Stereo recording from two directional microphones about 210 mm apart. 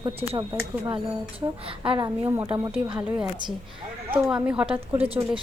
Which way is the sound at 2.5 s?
25° right (ahead or behind).